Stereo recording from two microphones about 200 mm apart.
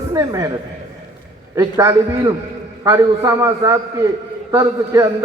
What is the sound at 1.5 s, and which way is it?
A man's voice, 15° right (ahead or behind).